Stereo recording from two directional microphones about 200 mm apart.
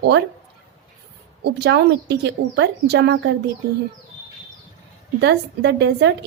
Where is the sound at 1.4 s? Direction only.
55° right (ahead or behind).